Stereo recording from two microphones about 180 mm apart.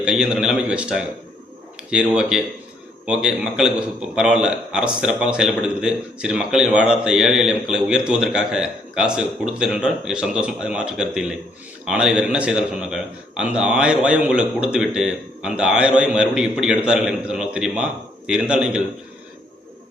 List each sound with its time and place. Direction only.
0.0 s a man's voice: 5° right (ahead or behind)